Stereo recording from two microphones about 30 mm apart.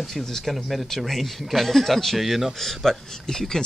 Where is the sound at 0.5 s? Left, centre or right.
Centre.